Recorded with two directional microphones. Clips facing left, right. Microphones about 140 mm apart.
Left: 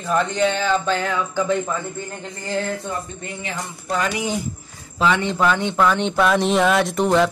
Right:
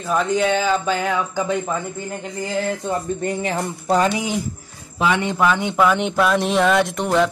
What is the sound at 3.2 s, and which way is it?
Speech, 45° right (ahead or behind).